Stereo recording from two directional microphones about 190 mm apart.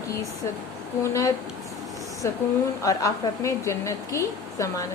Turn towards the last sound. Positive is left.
turn(degrees=15)  # may be behind; listen again after turning